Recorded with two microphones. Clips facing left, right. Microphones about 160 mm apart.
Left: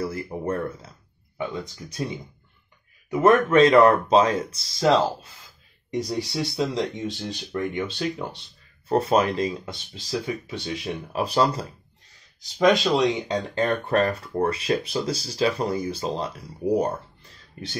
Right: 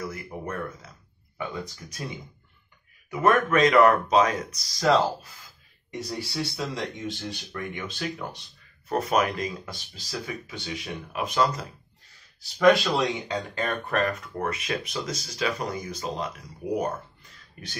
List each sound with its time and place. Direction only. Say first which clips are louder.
0.0 s a sound: left 6 dB; 30° left (ahead or behind)
1.4 s speech: left 3 dB; 25° left (ahead or behind)
12.5 s speech: left 1 dB; 20° left (ahead or behind)
13.6 s speech: left 5 dB; 30° left (ahead or behind)